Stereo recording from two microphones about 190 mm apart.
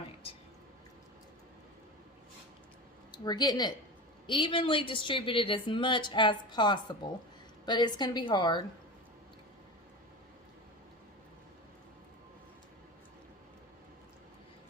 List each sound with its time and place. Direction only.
3.1 s a woman's voice: 20° left (ahead or behind)